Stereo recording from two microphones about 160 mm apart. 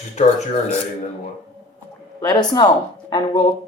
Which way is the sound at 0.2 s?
45° left (ahead or behind).